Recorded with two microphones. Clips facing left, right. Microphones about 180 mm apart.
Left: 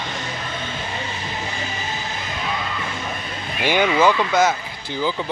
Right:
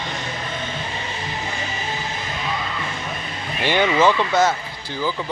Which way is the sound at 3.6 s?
10° left (ahead or behind).